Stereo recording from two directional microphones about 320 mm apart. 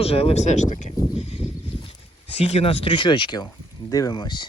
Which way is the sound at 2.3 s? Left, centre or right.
Centre.